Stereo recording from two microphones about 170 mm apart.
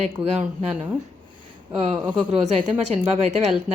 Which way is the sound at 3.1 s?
40° right (ahead or behind).